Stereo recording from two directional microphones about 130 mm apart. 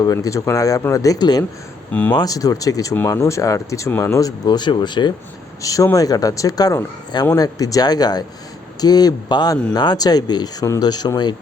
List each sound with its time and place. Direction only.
0.0 s speech: 25° left (ahead or behind)
1.9 s speech: 10° left (ahead or behind)
2.1 s speech: 30° left (ahead or behind)